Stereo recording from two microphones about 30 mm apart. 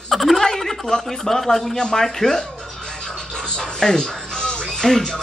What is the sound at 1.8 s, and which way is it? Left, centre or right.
Speech, left.